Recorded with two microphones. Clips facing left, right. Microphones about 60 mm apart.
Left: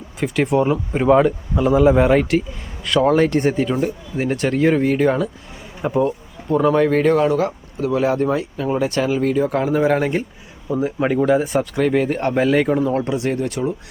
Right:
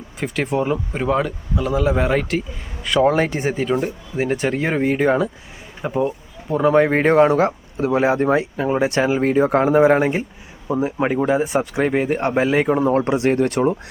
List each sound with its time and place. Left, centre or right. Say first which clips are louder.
0.2 s speech: left 4 dB; centre
2.8 s speech: left 1 dB; centre
6.7 s speech: right 1 dB; right; by 11.6 s centre
11.6 s speech: left 1 dB; right
13.1 s speech: right 4 dB; right